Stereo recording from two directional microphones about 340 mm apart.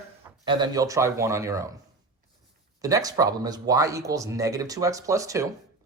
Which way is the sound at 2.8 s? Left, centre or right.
Centre.